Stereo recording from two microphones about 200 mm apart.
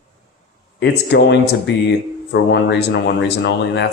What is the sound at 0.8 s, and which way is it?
Speech, 60° left (ahead or behind).